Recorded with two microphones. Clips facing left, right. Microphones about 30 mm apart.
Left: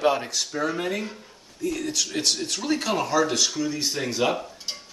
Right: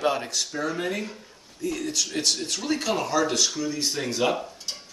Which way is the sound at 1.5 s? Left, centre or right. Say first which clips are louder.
Left 1 dB; centre.